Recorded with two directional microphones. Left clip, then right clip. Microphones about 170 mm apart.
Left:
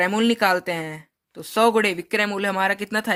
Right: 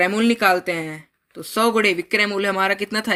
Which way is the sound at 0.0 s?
50° left (ahead or behind).